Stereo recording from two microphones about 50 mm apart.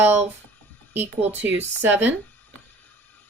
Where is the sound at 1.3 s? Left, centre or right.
Right.